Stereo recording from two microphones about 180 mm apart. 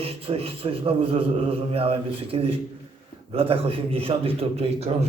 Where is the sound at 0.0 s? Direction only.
30° right (ahead or behind).